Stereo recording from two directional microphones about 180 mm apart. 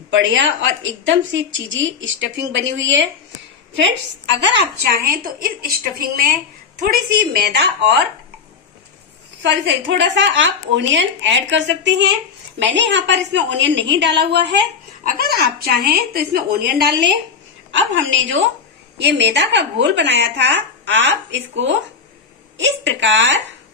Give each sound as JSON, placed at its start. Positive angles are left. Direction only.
{"t": 0.1, "sound": "a woman's voice", "side_deg": -90}
{"t": 4.6, "sound": "a woman's voice", "side_deg": -55}
{"t": 9.4, "sound": "a woman's voice", "side_deg": -85}
{"t": 15.0, "sound": "a woman's voice", "side_deg": -60}
{"t": 17.6, "sound": "a woman's voice", "side_deg": -90}
{"t": 18.9, "sound": "a woman's voice", "side_deg": -75}